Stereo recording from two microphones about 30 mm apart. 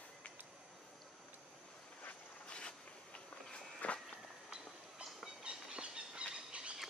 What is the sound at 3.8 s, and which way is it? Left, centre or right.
Walk, left.